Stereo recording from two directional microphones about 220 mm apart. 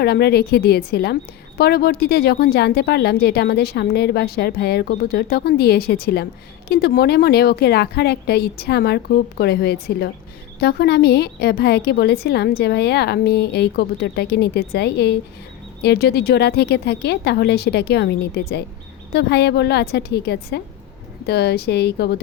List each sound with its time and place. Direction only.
0.0 s speech: 45° left (ahead or behind)